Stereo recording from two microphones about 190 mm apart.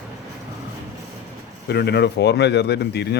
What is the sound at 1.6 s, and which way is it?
Speech, 60° left (ahead or behind).